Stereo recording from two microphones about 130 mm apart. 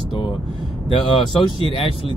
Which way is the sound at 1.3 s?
40° left (ahead or behind).